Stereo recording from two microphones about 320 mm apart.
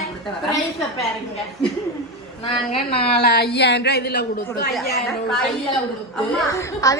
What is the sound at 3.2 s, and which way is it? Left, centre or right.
A woman's voice, left.